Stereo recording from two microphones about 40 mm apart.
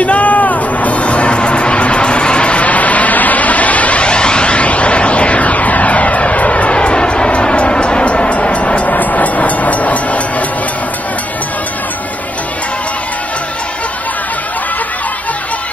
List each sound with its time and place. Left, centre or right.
0.0 s music: left